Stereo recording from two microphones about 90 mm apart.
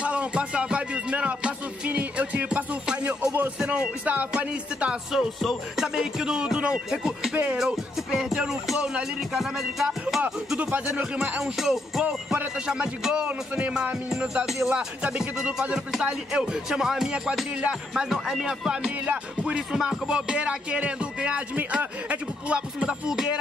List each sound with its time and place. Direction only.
0.0 s music: 15° right (ahead or behind)
3.5 s speech: 10° right (ahead or behind)
5.4 s speech: 5° right (ahead or behind)
8.4 s music: 5° right (ahead or behind)
10.5 s speech: 15° right (ahead or behind)
11.3 s speech: 5° right (ahead or behind)